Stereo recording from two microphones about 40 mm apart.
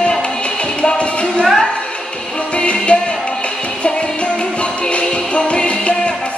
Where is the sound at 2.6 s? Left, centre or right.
Left.